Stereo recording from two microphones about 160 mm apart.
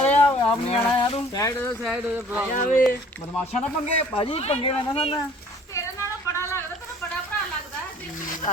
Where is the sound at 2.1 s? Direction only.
10° right (ahead or behind).